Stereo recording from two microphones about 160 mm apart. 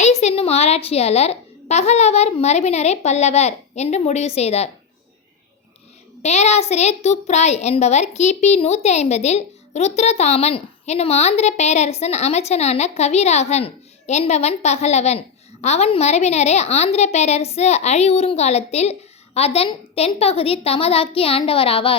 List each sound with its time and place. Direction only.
0.0 s a woman's voice: 45° left (ahead or behind)
6.2 s a woman's voice: 45° left (ahead or behind)